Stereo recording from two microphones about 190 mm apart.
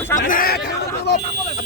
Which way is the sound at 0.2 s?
45° left (ahead or behind).